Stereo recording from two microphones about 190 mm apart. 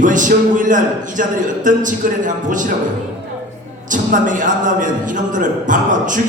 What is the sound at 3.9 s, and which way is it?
A man's voice, 40° right (ahead or behind).